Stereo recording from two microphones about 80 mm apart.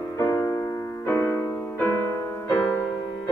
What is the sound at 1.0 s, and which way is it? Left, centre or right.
Music, left.